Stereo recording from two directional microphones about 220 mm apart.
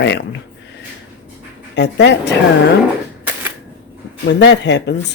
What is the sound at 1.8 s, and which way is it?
Speech, 50° left (ahead or behind).